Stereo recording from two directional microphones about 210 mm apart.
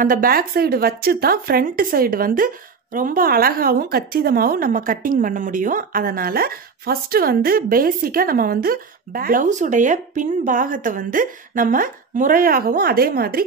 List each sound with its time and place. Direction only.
0.0 s speech: 40° right (ahead or behind)